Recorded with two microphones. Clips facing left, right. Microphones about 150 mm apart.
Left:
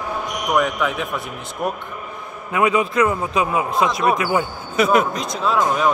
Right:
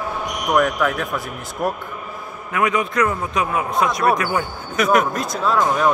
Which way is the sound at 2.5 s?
25° left (ahead or behind).